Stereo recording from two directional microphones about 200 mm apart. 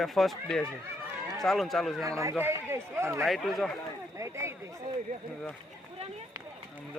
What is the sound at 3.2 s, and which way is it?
Speech, centre (ahead or behind).